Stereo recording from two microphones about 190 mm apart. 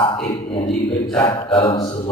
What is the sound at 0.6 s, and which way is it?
Speech, centre (ahead or behind).